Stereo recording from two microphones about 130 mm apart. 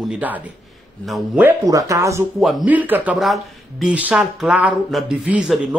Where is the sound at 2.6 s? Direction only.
10° right (ahead or behind).